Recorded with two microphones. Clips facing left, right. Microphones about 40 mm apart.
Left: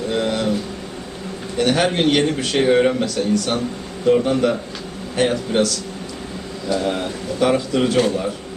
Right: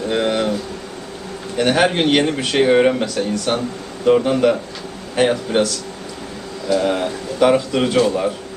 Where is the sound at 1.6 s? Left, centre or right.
Centre.